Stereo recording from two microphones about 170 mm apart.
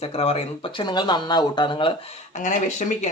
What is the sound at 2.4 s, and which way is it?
Speech, 45° left (ahead or behind).